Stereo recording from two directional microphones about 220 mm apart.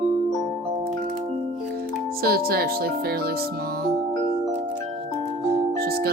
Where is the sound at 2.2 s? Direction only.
45° right (ahead or behind).